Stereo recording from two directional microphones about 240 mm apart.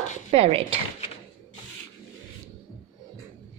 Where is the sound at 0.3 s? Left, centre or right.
Right.